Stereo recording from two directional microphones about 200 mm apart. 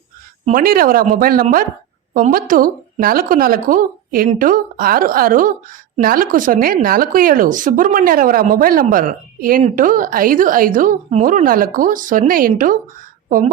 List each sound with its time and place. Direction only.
0.4 s speech: 45° right (ahead or behind)